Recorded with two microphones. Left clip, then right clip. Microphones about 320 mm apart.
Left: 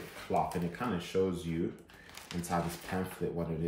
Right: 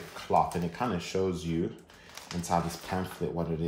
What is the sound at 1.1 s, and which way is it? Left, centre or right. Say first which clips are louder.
Speech: even; centre.